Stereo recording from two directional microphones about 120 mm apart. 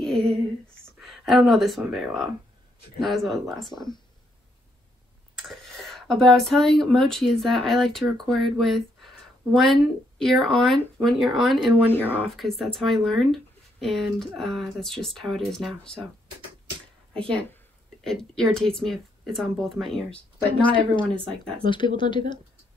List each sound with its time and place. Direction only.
0.0 s a sound: 5° left (ahead or behind)
1.0 s speech: centre (ahead or behind)
3.7 s speech: 40° left (ahead or behind)
5.5 s speech: centre (ahead or behind)
18.0 s speech: 5° left (ahead or behind)
20.6 s a woman's voice: 45° left (ahead or behind)
21.1 s speech: 45° right (ahead or behind)
21.6 s speech: 40° left (ahead or behind)